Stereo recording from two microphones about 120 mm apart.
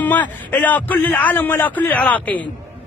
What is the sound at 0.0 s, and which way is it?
A man's voice, 15° left (ahead or behind).